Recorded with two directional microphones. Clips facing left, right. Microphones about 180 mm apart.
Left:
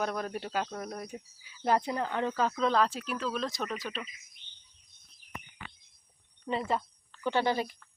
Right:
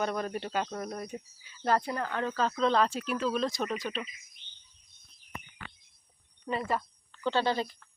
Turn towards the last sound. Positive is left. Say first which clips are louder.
# even
turn(degrees=15)  # may be behind; listen again after turning